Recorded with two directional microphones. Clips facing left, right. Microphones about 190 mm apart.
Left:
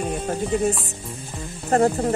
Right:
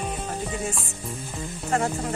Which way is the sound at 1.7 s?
35° left (ahead or behind).